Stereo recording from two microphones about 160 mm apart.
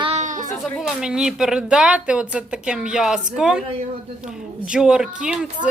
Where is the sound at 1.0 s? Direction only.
5° right (ahead or behind).